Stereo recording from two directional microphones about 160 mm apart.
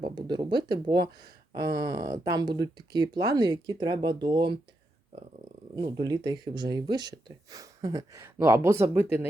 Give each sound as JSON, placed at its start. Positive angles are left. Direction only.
{"t": 0.0, "sound": "speech", "side_deg": -25}
{"t": 5.7, "sound": "speech", "side_deg": -25}